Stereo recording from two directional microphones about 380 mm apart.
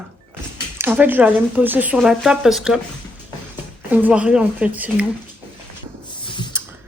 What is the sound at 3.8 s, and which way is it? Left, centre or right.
A woman's voice, centre.